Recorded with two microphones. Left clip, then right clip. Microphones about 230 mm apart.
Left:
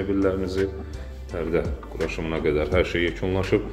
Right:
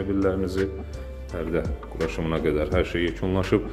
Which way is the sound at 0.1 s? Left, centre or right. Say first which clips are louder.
Left 1 dB; centre.